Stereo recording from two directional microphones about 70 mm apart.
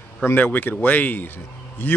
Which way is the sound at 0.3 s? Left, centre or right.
Left.